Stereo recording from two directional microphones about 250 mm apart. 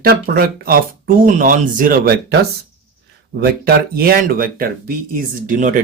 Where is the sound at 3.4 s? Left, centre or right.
Right.